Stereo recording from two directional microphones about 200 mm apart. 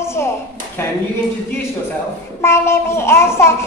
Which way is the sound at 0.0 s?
15° left (ahead or behind).